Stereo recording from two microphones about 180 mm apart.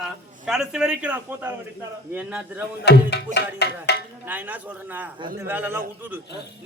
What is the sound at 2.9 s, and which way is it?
Music, 70° left (ahead or behind).